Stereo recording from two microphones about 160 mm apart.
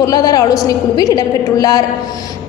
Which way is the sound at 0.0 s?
25° left (ahead or behind).